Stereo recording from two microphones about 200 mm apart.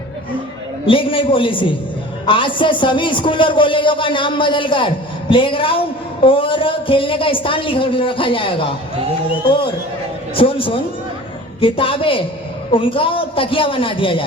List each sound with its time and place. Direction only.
0.9 s a man's voice: 25° left (ahead or behind)
10.3 s a man's voice: 25° left (ahead or behind)